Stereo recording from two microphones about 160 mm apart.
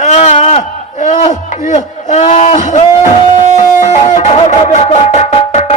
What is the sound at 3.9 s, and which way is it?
Music, 45° left (ahead or behind).